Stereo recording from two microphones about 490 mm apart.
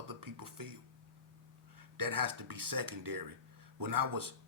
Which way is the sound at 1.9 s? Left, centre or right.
Right.